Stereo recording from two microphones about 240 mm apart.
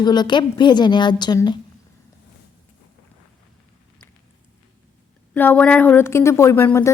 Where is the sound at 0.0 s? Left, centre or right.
Centre.